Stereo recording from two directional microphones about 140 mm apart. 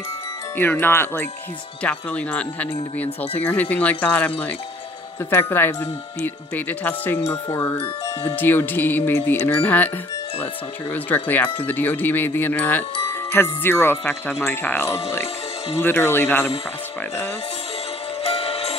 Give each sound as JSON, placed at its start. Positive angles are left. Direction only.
{"t": 0.6, "sound": "speech", "side_deg": 15}
{"t": 10.9, "sound": "speech", "side_deg": 15}
{"t": 18.2, "sound": "music", "side_deg": 45}